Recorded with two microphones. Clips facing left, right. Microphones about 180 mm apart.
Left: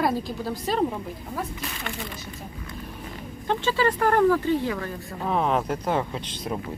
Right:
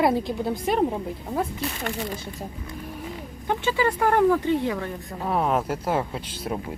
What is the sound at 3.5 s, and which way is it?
Speech, 15° right (ahead or behind).